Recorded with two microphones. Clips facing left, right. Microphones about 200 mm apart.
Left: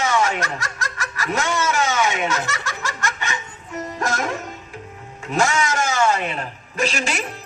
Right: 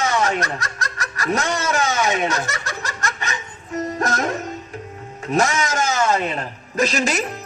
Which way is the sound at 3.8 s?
40° right (ahead or behind).